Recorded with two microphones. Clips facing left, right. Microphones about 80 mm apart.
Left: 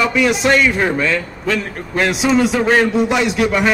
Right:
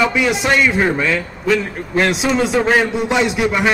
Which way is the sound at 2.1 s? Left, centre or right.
Right.